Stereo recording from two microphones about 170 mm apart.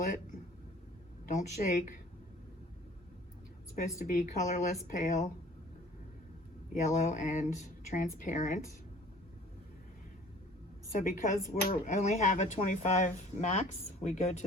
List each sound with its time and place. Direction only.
1.3 s speech: 50° left (ahead or behind)
3.8 s speech: 50° left (ahead or behind)
6.7 s speech: 45° left (ahead or behind)
11.0 s speech: 45° left (ahead or behind)